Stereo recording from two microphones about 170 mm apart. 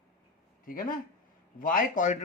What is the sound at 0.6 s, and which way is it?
Speech, 55° left (ahead or behind).